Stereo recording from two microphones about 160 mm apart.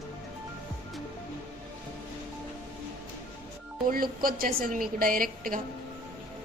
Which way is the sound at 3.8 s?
65° right (ahead or behind).